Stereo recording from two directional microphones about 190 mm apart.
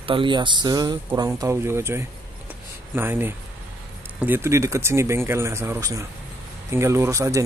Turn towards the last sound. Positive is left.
turn(degrees=-15)  # may be behind; listen again after turning